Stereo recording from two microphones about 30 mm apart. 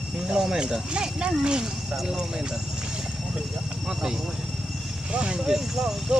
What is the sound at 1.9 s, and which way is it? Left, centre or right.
Speech, centre.